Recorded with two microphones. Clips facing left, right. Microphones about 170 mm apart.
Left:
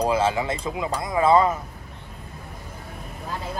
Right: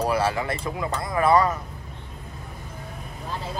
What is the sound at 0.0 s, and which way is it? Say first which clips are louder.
Speech: left 2 dB; 20° left (ahead or behind).